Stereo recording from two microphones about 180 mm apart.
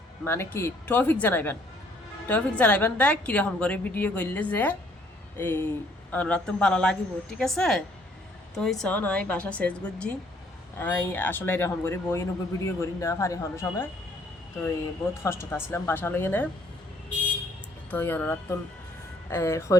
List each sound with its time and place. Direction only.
0.3 s a woman's voice: 15° left (ahead or behind)
15.2 s speech: 15° left (ahead or behind)
17.9 s speech: 10° left (ahead or behind)